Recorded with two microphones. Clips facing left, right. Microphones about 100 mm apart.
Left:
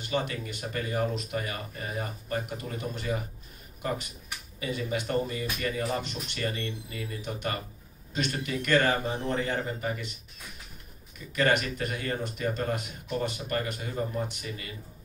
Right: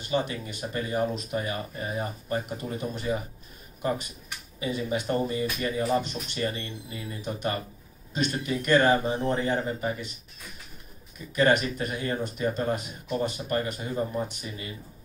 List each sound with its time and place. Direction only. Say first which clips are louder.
0.0 s speech: right 2 dB; 25° right (ahead or behind)
4.6 s speech: right 3 dB; 25° right (ahead or behind)
11.3 s speech: right 3 dB; 25° right (ahead or behind)